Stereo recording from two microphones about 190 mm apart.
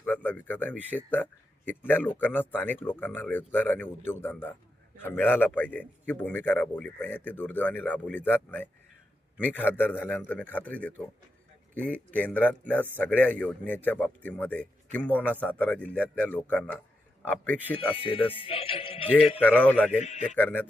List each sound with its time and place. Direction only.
0.0 s a man's voice: 10° left (ahead or behind)
17.7 s speech: 30° left (ahead or behind)
19.4 s speech: 10° left (ahead or behind)
20.0 s a man's voice: 40° left (ahead or behind)
20.3 s speech: 10° left (ahead or behind)